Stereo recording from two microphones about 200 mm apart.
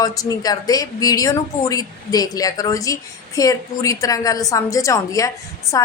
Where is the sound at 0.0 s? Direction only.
20° left (ahead or behind).